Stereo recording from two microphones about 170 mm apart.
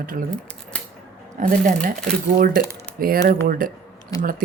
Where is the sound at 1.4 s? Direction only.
45° right (ahead or behind).